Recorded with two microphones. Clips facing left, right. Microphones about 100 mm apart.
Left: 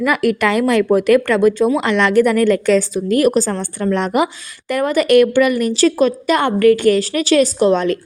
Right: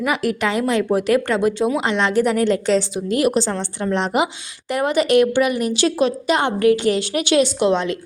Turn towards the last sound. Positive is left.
turn(degrees=50)  # may be behind; listen again after turning